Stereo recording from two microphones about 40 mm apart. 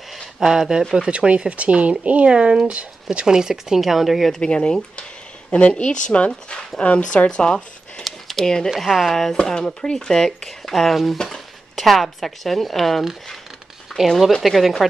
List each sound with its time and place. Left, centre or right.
0.4 s speech: centre; by 2.9 s right
3.1 s speech: centre
3.8 s a woman's voice: centre
4.3 s speech: left
7.2 s speech: left
8.0 s a sound: centre
8.6 s a woman's voice: centre
9.4 s speech: centre
14.0 s a woman's voice: centre